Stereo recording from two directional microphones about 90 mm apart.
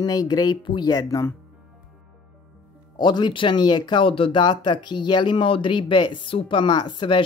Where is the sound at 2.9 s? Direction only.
55° left (ahead or behind).